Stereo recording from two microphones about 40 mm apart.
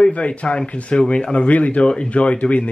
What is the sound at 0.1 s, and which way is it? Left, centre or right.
Speech, left.